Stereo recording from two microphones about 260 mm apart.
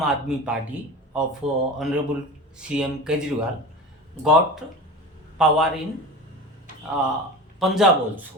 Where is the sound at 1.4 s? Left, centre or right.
Right.